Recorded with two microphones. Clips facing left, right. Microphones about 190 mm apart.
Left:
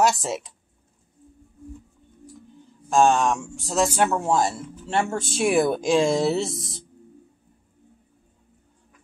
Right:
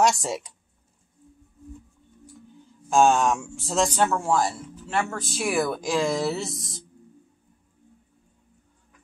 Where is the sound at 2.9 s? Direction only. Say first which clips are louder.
Even; centre (ahead or behind).